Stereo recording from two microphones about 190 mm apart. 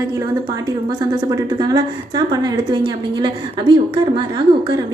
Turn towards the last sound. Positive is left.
turn(degrees=-25)  # may be behind; listen again after turning